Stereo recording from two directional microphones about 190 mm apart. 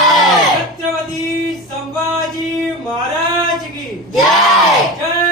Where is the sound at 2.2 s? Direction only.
Centre (ahead or behind).